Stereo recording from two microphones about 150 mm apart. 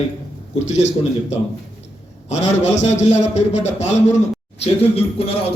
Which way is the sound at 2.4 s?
50° left (ahead or behind).